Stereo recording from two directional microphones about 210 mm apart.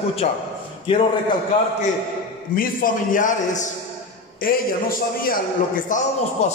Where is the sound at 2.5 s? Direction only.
40° left (ahead or behind).